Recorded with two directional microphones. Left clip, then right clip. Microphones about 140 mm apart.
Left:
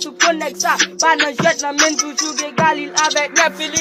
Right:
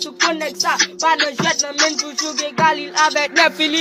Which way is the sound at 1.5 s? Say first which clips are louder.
Left 1 dB; 45° left (ahead or behind).